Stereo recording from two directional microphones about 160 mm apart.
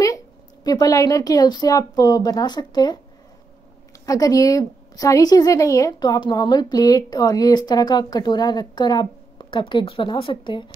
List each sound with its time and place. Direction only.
0.7 s a woman's voice: 20° left (ahead or behind)
4.0 s a woman's voice: 20° left (ahead or behind)